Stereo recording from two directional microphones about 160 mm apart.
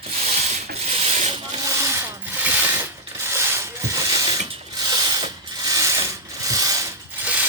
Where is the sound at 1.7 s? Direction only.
20° right (ahead or behind).